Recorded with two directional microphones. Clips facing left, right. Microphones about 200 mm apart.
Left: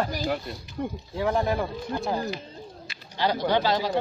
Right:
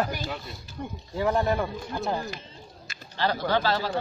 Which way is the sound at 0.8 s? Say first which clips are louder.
Left 6 dB; 50° left (ahead or behind).